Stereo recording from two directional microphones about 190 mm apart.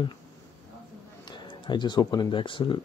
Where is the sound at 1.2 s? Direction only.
25° left (ahead or behind).